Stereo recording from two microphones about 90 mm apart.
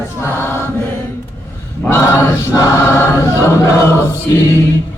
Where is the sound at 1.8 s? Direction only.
35° left (ahead or behind).